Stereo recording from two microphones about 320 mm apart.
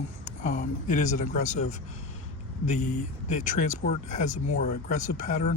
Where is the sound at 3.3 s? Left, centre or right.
Left.